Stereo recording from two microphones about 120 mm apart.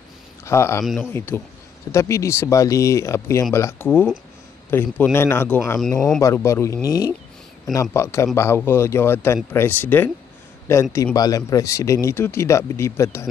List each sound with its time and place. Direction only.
0.5 s speech: 20° left (ahead or behind)
5.8 s speech: 5° left (ahead or behind)
6.2 s speech: 25° left (ahead or behind)